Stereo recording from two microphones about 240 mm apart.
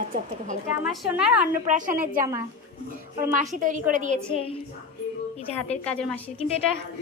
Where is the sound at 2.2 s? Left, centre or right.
Centre.